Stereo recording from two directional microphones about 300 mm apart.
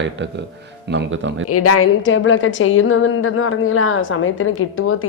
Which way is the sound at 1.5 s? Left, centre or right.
Left.